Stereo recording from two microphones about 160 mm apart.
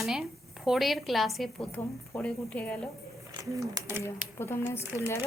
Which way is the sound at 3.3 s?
20° right (ahead or behind).